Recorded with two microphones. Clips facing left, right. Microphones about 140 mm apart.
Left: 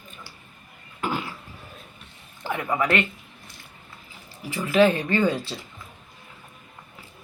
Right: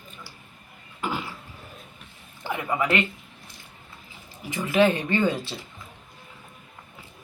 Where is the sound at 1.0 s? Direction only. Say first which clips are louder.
Left 2 dB; 10° right (ahead or behind).